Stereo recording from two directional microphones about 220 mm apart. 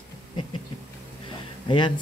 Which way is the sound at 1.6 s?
20° left (ahead or behind).